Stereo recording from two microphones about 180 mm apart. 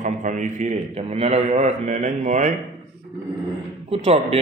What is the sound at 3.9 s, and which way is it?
Speech, 30° right (ahead or behind).